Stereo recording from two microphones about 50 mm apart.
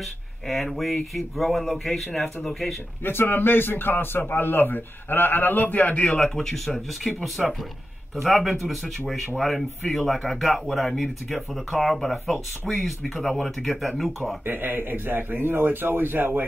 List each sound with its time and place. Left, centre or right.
0.5 s speech: centre
3.0 s a man's voice: left
6.1 s speech: centre
14.4 s a man's voice: right